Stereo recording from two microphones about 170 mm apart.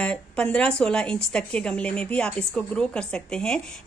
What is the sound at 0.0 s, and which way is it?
Speech, 5° left (ahead or behind).